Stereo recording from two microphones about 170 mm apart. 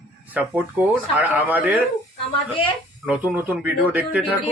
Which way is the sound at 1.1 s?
10° right (ahead or behind).